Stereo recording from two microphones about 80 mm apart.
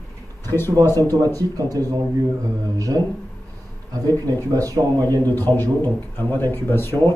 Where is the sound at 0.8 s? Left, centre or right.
Left.